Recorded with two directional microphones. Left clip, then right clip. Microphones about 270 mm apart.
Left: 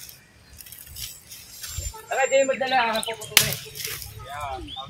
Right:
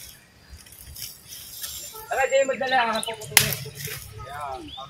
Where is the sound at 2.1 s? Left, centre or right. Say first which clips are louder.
Left 1 dB; left.